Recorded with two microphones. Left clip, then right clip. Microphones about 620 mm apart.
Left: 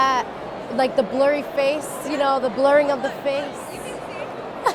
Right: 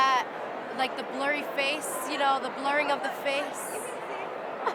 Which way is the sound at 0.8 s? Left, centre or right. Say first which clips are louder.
Left 12 dB; left.